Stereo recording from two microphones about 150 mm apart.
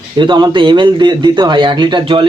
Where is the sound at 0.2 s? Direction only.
30° right (ahead or behind).